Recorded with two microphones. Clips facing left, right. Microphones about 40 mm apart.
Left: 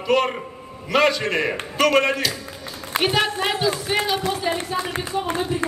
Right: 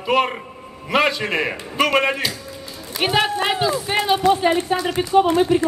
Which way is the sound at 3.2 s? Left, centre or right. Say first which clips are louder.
Right 2 dB; right.